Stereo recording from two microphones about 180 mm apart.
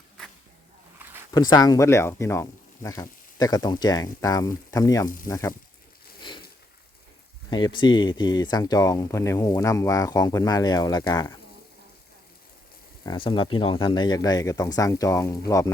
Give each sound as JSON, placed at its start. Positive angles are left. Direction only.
{"t": 1.3, "sound": "speech", "side_deg": 20}
{"t": 7.5, "sound": "speech", "side_deg": 25}
{"t": 13.1, "sound": "speech", "side_deg": 25}